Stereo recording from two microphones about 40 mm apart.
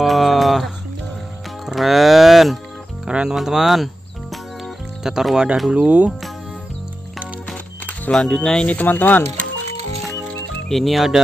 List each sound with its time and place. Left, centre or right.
0.0 s a sound: centre
1.7 s music: centre
3.1 s music: right
3.3 s speech: centre
5.7 s speech: right
8.1 s speech: centre
8.6 s speech: left
10.7 s speech: centre